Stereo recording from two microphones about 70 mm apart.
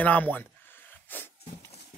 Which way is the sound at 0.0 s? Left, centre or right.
Left.